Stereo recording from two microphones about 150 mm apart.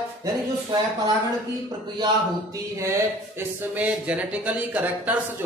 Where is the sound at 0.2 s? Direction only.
30° right (ahead or behind).